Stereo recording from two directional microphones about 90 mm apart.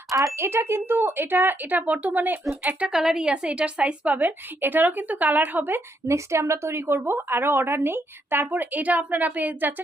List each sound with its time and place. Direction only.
0.3 s a woman's voice: 30° right (ahead or behind)
2.9 s a woman's voice: 5° right (ahead or behind)